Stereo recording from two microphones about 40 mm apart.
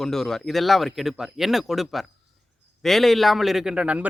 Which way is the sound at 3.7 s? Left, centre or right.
Right.